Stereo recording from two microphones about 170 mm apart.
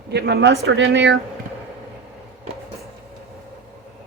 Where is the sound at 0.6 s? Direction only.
80° right.